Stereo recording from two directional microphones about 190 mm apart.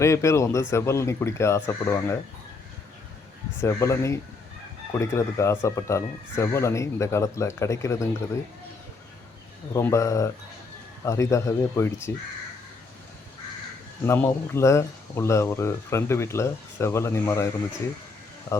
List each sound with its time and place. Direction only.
0.0 s speech: 15° left (ahead or behind)
3.6 s speech: 15° left (ahead or behind)
9.7 s speech: 15° left (ahead or behind)
14.0 s speech: 15° left (ahead or behind)